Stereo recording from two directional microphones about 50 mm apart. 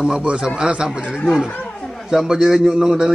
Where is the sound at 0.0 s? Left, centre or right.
Centre.